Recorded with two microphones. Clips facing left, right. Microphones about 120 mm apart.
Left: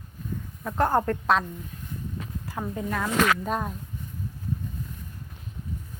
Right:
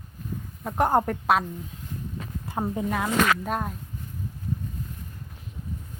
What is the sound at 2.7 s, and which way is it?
Speech, 15° right (ahead or behind).